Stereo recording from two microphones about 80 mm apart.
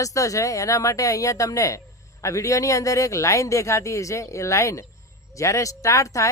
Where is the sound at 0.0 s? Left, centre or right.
Left.